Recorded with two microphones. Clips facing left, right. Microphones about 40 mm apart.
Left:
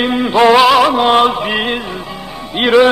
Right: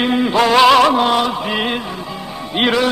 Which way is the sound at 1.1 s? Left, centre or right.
Left.